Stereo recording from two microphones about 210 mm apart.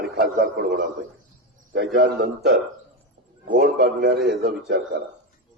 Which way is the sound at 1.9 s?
45° right (ahead or behind).